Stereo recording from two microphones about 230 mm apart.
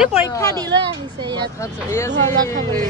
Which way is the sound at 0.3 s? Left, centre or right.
Centre.